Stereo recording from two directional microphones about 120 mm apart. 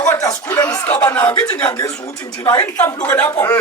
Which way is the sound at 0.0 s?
30° left (ahead or behind).